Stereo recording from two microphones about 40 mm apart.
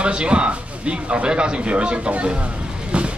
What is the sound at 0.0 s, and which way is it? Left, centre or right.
Speech, right.